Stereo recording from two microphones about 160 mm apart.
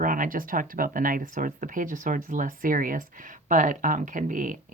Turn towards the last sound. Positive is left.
turn(degrees=-55)  # may be behind; listen again after turning